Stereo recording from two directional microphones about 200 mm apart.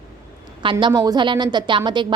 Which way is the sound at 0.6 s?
25° right (ahead or behind).